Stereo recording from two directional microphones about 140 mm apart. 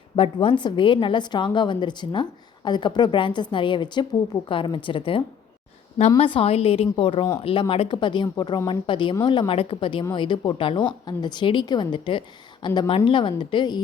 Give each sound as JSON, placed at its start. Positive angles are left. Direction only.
{"t": 0.2, "sound": "speech", "side_deg": 40}